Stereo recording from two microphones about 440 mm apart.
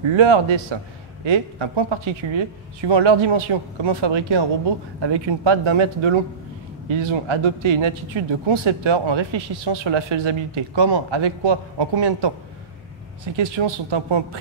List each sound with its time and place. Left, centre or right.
0.1 s a man's voice: right
9.7 s speech: right
13.4 s speech: right